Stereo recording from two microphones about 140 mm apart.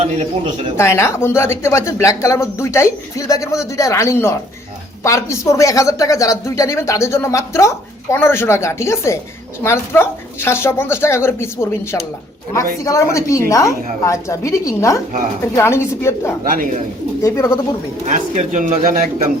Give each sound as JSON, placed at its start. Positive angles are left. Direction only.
{"t": 0.0, "sound": "speech", "side_deg": -50}
{"t": 0.8, "sound": "speech", "side_deg": 20}
{"t": 12.8, "sound": "speech", "side_deg": 20}
{"t": 16.4, "sound": "speech", "side_deg": -80}
{"t": 17.2, "sound": "speech", "side_deg": 20}
{"t": 18.0, "sound": "speech", "side_deg": -55}